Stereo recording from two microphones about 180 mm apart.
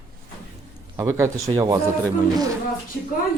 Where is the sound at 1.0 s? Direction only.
15° right (ahead or behind).